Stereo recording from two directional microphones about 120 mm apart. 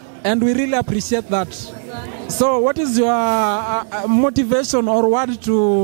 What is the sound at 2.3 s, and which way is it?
Speech, 20° right (ahead or behind).